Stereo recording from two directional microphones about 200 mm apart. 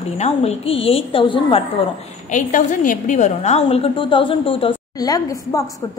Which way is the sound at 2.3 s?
40° left (ahead or behind).